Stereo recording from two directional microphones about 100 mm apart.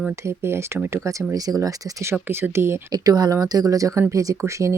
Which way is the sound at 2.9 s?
40° right (ahead or behind).